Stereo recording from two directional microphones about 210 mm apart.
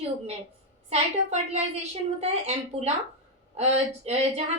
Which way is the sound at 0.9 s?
30° right (ahead or behind).